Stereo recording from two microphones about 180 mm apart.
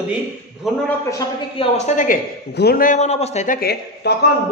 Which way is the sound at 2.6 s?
55° left (ahead or behind).